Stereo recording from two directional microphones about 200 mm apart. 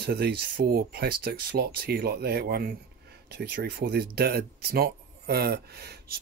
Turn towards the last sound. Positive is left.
turn(degrees=-55)  # may be behind; listen again after turning